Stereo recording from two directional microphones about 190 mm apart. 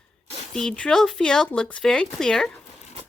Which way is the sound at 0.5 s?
5° left (ahead or behind).